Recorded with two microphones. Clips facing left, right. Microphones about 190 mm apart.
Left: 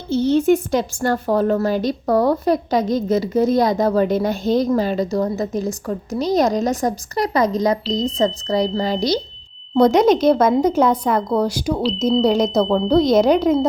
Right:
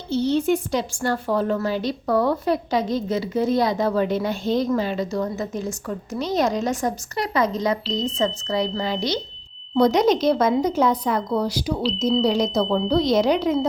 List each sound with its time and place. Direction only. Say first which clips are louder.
0.1 s a woman's voice: left 5 dB; 45° left (ahead or behind)
9.7 s a woman's voice: left 4 dB; 50° left (ahead or behind)